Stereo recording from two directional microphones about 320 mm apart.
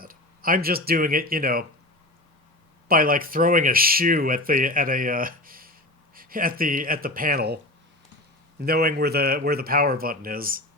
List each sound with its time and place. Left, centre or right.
0.0 s speech: right
2.9 s speech: right